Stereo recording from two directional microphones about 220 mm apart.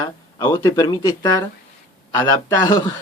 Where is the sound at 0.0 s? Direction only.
20° left (ahead or behind).